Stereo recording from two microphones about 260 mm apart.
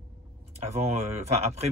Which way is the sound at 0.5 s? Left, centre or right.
Right.